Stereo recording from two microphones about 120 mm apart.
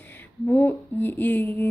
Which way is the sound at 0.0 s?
15° left (ahead or behind).